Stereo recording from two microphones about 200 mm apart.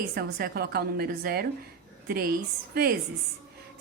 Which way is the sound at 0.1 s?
50° right (ahead or behind).